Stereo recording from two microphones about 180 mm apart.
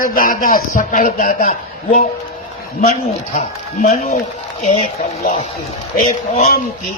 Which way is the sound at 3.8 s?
45° left (ahead or behind).